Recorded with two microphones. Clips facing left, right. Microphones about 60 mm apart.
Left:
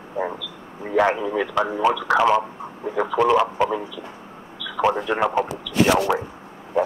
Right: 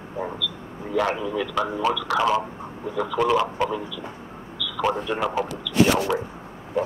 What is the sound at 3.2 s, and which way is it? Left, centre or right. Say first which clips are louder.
Speech: left 3 dB; centre.